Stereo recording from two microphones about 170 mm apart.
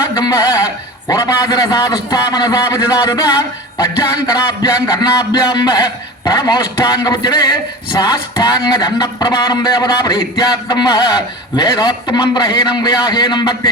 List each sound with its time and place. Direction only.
0.1 s a man's voice: 20° left (ahead or behind)